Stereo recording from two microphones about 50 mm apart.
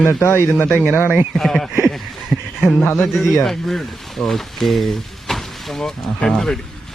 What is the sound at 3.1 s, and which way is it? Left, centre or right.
Speech, centre.